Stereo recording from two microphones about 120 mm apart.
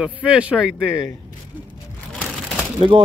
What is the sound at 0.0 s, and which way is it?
Speech, 10° right (ahead or behind).